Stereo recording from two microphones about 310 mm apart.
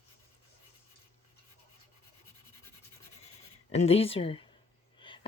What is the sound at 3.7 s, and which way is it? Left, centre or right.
Speech, centre.